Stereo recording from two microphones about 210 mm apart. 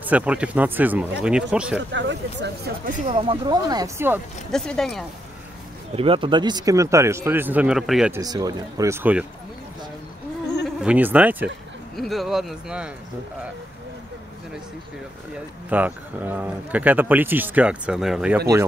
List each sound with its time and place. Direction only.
0.0 s speech: 5° right (ahead or behind)
1.9 s speech: 60° right (ahead or behind)
3.1 s speech: 25° right (ahead or behind)
4.5 s speech: centre (ahead or behind)
5.9 s speech: 25° right (ahead or behind); by 8.2 s centre (ahead or behind)
8.2 s speech: 15° right (ahead or behind)
10.8 s speech: 5° right (ahead or behind)
15.3 s speech: 5° right (ahead or behind)